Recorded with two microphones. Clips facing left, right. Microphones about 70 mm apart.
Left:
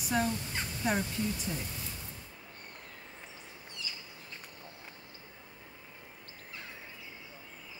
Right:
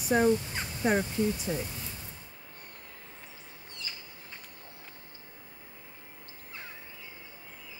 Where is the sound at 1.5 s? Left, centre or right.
Right.